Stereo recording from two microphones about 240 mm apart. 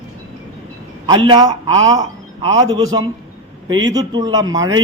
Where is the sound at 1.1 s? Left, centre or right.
Centre.